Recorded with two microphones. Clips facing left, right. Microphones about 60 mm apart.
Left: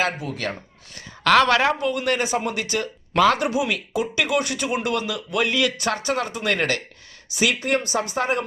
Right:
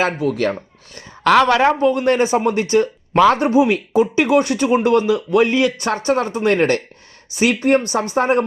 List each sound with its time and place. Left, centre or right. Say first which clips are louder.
0.2 s speech: right 10 dB; right
1.3 s a woman's voice: right 4 dB; right
1.8 s speech: right 8 dB; right